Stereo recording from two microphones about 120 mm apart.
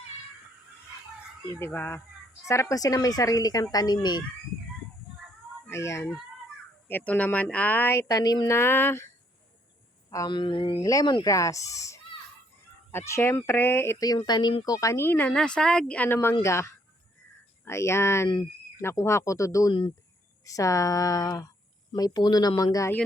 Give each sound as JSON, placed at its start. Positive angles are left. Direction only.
{"t": 1.5, "sound": "speech", "side_deg": 20}
{"t": 5.6, "sound": "speech", "side_deg": 25}
{"t": 8.5, "sound": "speech", "side_deg": 20}
{"t": 10.1, "sound": "speech", "side_deg": 30}
{"t": 10.3, "sound": "speech", "side_deg": 40}
{"t": 10.8, "sound": "speech", "side_deg": 30}
{"t": 14.0, "sound": "speech", "side_deg": 35}